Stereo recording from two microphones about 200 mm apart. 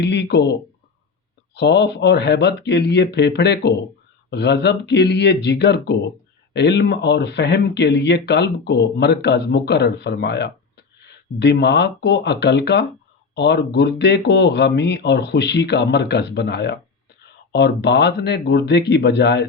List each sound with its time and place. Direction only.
0.0 s speech: 60° left (ahead or behind)
1.5 s speech: 60° left (ahead or behind)